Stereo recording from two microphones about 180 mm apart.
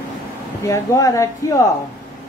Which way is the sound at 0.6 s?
15° left (ahead or behind).